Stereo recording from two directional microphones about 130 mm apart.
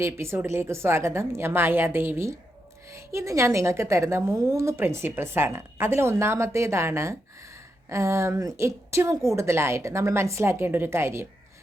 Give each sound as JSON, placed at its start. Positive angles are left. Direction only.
{"t": 0.0, "sound": "a woman's voice", "side_deg": -20}